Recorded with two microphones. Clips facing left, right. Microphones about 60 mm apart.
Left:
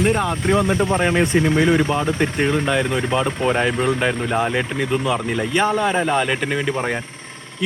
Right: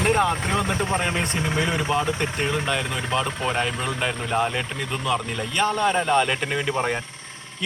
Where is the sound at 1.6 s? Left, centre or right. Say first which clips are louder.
Left 6 dB; centre.